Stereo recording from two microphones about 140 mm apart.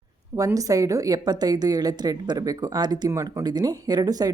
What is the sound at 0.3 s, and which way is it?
A woman's voice, 25° right (ahead or behind).